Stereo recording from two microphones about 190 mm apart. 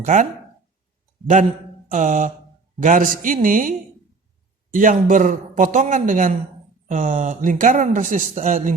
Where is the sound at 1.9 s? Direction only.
40° right (ahead or behind).